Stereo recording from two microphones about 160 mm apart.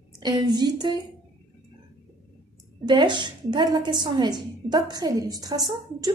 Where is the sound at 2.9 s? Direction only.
30° right (ahead or behind).